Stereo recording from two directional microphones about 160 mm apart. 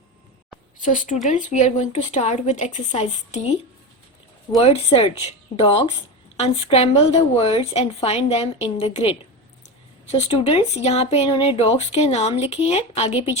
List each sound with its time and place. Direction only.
0.8 s speech: 50° left (ahead or behind)
4.5 s a woman's voice: 40° left (ahead or behind)